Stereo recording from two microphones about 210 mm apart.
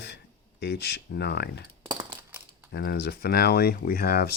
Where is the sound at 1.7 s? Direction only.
20° right (ahead or behind).